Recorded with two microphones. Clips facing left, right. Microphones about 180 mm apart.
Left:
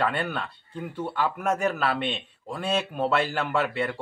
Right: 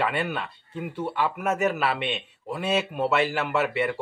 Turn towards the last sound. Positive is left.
turn(degrees=-5)  # may be behind; listen again after turning